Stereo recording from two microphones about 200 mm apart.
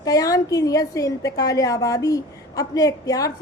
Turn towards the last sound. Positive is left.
turn(degrees=15)  # may be behind; listen again after turning